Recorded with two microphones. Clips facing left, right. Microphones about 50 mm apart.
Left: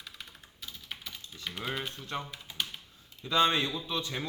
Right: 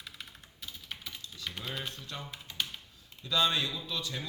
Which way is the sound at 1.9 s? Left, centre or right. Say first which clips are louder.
Left 5 dB; left.